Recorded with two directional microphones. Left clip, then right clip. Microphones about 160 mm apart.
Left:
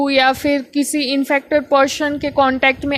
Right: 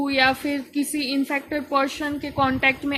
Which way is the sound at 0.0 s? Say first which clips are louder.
Left 6 dB; 55° left (ahead or behind).